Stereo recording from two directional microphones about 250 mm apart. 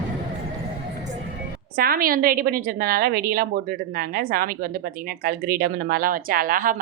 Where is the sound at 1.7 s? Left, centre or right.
Right.